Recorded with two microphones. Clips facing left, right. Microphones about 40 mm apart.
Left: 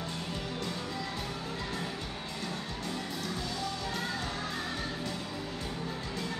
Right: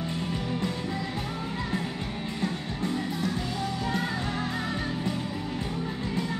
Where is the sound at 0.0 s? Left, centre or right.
Right.